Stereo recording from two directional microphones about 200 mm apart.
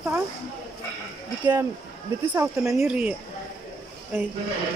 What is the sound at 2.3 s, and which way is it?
Speech, 15° right (ahead or behind).